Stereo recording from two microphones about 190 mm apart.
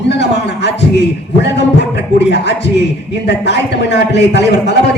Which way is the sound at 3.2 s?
65° left (ahead or behind).